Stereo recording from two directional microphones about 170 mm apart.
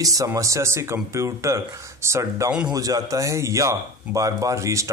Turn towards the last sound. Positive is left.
turn(degrees=-20)  # may be behind; listen again after turning